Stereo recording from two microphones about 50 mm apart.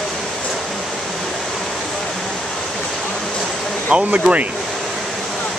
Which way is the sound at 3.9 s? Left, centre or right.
Right.